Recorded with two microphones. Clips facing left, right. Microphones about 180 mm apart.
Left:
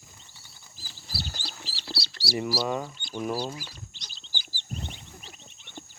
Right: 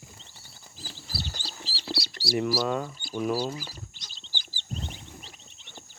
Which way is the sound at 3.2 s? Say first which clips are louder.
Right 3 dB; 10° right (ahead or behind).